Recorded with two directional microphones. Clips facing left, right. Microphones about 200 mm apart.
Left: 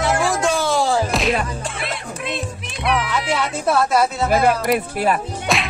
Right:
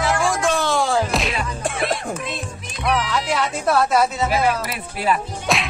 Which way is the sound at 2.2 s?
60° left (ahead or behind).